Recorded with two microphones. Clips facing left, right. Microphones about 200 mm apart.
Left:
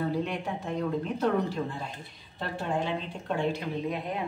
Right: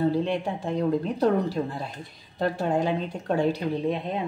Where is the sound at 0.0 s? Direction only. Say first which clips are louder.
Right 6 dB; 30° right (ahead or behind).